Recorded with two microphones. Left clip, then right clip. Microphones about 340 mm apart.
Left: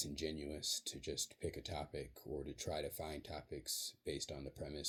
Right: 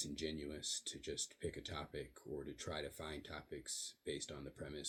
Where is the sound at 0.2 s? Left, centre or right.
Centre.